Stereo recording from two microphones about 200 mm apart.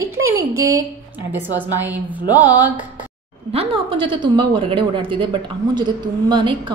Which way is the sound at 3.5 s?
30° right (ahead or behind).